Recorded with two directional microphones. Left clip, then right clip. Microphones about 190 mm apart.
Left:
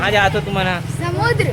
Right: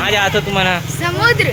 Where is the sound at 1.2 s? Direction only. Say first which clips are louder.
Right 5 dB; 10° left (ahead or behind).